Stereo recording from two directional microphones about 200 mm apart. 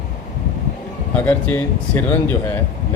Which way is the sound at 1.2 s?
10° left (ahead or behind).